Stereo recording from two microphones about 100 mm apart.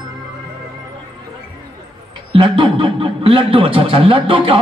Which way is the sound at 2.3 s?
55° right (ahead or behind).